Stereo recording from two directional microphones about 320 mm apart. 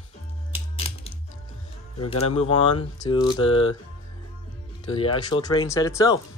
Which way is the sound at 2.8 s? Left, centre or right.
Centre.